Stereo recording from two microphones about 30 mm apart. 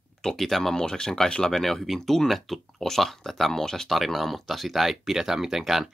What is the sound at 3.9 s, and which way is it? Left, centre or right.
Speech, centre.